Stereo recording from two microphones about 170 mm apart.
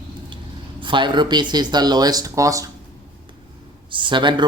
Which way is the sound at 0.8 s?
30° right (ahead or behind).